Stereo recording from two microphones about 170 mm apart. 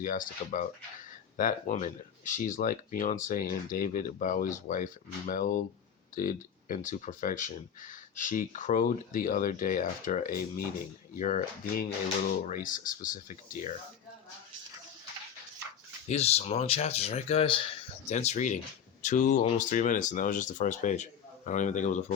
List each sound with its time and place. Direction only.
0.0 s speech: 55° left (ahead or behind)
16.0 s speech: 40° left (ahead or behind)